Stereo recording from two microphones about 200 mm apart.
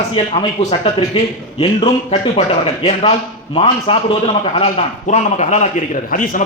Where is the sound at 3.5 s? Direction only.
30° left (ahead or behind).